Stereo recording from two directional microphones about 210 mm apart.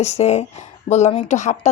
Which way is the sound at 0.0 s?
30° left (ahead or behind).